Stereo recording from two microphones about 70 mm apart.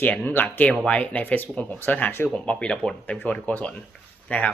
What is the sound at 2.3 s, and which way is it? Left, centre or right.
Speech, centre.